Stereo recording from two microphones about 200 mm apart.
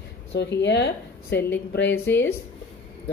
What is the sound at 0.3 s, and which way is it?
A woman's voice, 60° left (ahead or behind).